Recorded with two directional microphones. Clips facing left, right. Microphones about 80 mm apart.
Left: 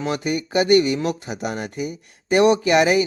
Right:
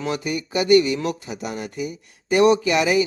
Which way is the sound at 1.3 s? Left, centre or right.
Left.